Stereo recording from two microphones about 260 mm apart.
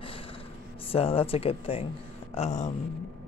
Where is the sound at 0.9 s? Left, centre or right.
Left.